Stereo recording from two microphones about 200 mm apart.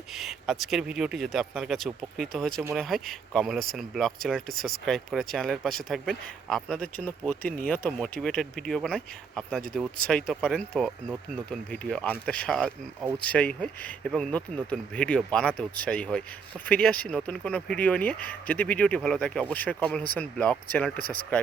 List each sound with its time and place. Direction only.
0.1 s speech: centre (ahead or behind)